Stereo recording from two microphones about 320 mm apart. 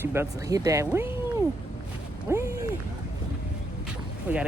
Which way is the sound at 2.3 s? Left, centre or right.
Centre.